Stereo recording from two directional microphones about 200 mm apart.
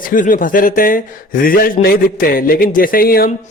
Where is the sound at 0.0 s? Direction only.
40° left (ahead or behind).